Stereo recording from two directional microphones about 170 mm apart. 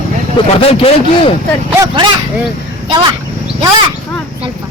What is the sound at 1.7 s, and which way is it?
Speech, 20° right (ahead or behind).